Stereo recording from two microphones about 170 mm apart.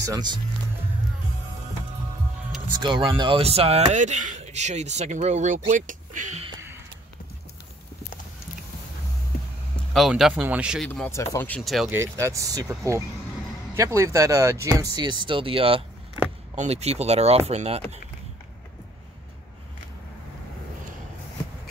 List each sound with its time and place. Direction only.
0.0 s speech: 25° right (ahead or behind)
2.7 s speech: 25° right (ahead or behind); by 6.4 s 50° right (ahead or behind)
9.9 s speech: centre (ahead or behind)
10.9 s speech: 15° left (ahead or behind)
11.9 s speech: 15° right (ahead or behind); by 17.8 s 40° right (ahead or behind)